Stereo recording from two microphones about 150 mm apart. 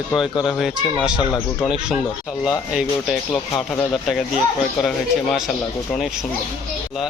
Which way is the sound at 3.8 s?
Centre (ahead or behind).